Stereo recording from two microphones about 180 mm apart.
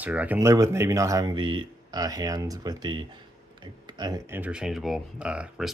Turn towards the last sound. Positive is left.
turn(degrees=-5)  # may be behind; listen again after turning